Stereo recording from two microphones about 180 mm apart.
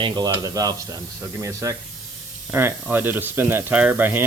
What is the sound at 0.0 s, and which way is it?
Speech, 20° right (ahead or behind).